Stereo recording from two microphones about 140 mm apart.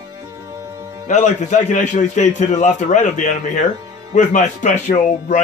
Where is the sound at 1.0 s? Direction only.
60° left (ahead or behind).